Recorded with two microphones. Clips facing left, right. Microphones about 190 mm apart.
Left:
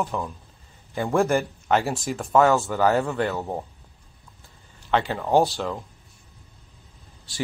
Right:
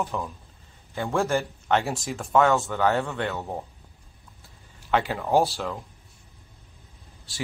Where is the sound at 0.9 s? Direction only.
15° left (ahead or behind).